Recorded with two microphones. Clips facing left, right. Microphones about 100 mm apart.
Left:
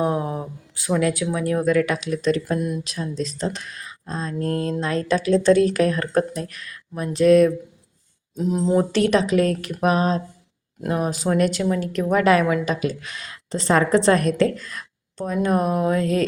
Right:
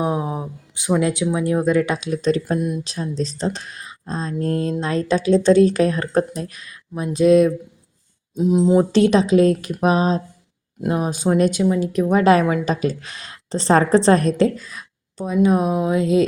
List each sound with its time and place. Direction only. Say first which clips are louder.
0.0 s a woman's voice: even; 15° right (ahead or behind)